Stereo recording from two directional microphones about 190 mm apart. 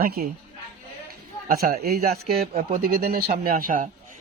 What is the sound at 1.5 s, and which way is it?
A man's voice, 50° right (ahead or behind).